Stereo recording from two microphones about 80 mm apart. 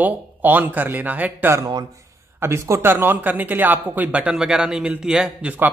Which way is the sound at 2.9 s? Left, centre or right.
Right.